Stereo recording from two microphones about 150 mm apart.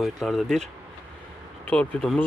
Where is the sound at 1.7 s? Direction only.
10° left (ahead or behind).